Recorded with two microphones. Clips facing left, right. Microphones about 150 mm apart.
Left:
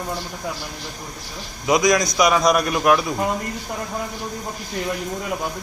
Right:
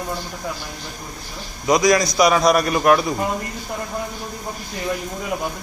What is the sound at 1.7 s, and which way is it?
A man's voice, centre (ahead or behind).